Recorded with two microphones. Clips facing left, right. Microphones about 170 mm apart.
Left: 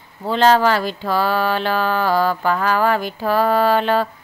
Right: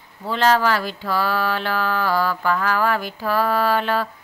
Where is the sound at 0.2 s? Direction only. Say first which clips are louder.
Left 4 dB; 25° left (ahead or behind).